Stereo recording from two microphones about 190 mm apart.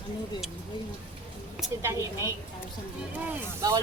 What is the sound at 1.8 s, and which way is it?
Speech, 15° right (ahead or behind).